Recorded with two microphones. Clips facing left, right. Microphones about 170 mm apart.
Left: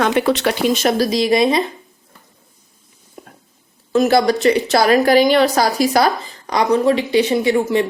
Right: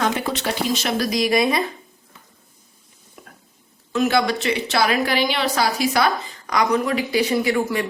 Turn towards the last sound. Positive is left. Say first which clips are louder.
# left 5 dB
turn(degrees=25)  # may be behind; listen again after turning